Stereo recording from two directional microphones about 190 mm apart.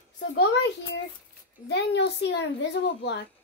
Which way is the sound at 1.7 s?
65° left (ahead or behind).